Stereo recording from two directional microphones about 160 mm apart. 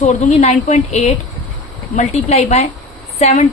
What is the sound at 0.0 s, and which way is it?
A woman's voice, 45° left (ahead or behind).